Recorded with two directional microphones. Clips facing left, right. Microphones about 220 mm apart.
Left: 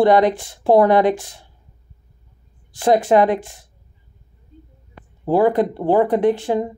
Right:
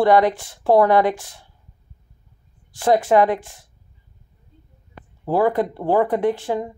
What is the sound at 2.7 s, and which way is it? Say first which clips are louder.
Speech: left 2 dB; 20° left (ahead or behind).